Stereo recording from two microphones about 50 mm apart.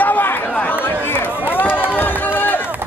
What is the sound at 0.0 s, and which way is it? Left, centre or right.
Chatter, left.